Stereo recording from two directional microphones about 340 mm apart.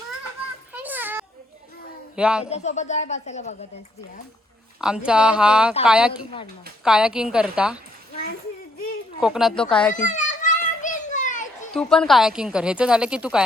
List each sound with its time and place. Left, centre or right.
0.7 s a sound: centre
2.1 s speech: centre
2.5 s speech: centre
4.8 s speech: centre
9.2 s speech: centre
9.9 s children playing: left
11.7 s speech: centre